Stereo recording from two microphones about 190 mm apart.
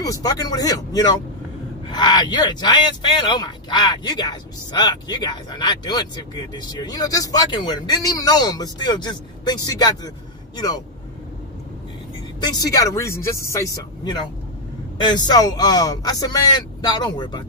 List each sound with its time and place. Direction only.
0.0 s a man's voice: 20° left (ahead or behind)
12.4 s speech: 20° left (ahead or behind)
15.0 s a man's voice: 20° left (ahead or behind)